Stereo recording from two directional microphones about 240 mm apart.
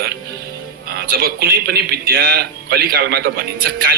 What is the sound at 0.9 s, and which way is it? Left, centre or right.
A man's voice, right.